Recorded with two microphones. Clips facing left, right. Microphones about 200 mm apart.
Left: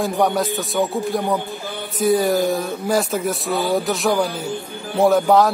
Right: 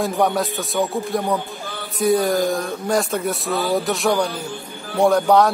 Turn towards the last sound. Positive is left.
turn(degrees=0)  # may be behind; listen again after turning